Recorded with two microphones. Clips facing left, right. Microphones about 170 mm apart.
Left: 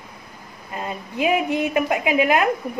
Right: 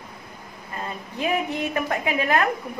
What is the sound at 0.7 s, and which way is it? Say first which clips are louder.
A woman's voice: left 4 dB; 15° left (ahead or behind).